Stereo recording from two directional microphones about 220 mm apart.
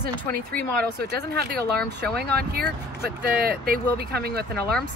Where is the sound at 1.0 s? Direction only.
45° right (ahead or behind).